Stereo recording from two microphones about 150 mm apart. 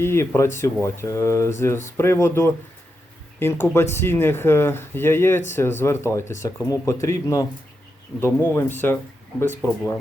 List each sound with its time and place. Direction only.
0.0 s speech: 15° left (ahead or behind)